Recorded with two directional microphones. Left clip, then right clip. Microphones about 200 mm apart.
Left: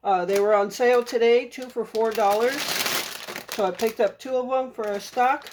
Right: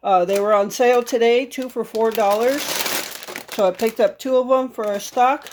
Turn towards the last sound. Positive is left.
turn(degrees=-45)  # may be behind; listen again after turning